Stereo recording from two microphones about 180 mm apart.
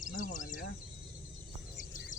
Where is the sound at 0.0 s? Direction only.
45° left (ahead or behind).